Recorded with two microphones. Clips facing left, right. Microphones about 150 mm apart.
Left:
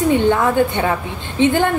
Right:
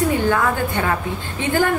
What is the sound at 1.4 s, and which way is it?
Speech, 20° left (ahead or behind).